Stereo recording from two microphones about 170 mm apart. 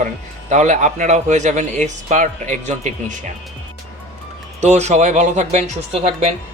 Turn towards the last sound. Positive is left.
turn(degrees=-40)  # may be behind; listen again after turning